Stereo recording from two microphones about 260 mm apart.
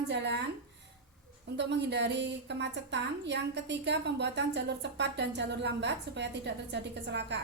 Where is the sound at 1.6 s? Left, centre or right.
Right.